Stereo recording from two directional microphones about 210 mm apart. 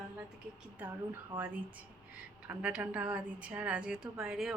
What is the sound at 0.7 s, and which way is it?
A woman's voice, 10° right (ahead or behind).